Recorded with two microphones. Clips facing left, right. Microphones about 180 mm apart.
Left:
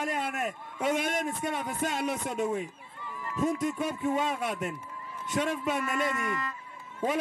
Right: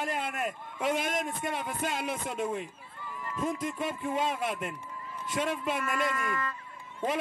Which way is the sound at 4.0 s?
45° left (ahead or behind).